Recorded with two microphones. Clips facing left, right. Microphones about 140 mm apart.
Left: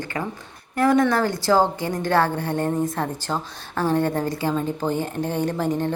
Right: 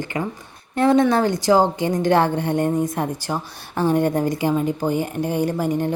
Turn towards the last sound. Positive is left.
turn(degrees=-10)  # may be behind; listen again after turning